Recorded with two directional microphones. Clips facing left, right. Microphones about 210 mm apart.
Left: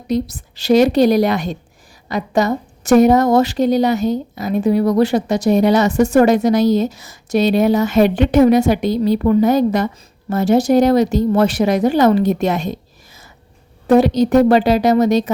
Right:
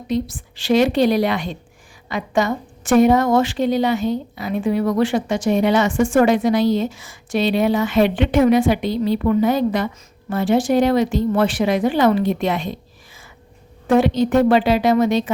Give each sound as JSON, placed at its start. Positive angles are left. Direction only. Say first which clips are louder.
{"t": 0.1, "sound": "a woman's voice", "louder": "left 3 dB", "side_deg": 40}
{"t": 13.8, "sound": "a woman's voice", "louder": "left 4 dB", "side_deg": 40}